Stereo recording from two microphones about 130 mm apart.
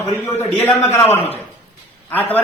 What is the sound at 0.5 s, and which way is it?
Speech, 15° left (ahead or behind).